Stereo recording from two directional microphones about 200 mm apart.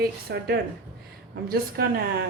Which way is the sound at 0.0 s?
50° right (ahead or behind).